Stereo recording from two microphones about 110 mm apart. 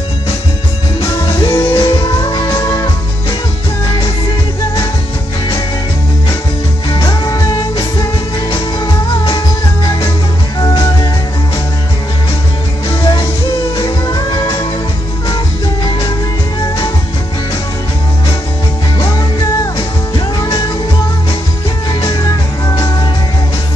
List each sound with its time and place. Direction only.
1.4 s music: 30° left (ahead or behind)
1.9 s music: 40° left (ahead or behind)
7.0 s music: 30° left (ahead or behind)
13.0 s music: 35° left (ahead or behind)
18.9 s music: 30° left (ahead or behind)
22.0 s music: 35° left (ahead or behind)